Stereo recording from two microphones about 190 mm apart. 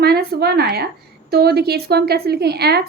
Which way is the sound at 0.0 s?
55° right (ahead or behind).